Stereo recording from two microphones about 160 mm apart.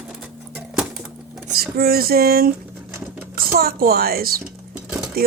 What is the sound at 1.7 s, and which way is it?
Speech, 70° right (ahead or behind).